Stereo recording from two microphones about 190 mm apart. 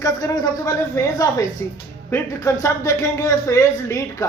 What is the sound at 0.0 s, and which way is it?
A woman's voice, 15° left (ahead or behind).